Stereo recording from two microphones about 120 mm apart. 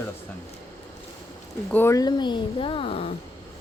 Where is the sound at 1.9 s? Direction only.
35° left (ahead or behind); by 3.1 s 55° left (ahead or behind).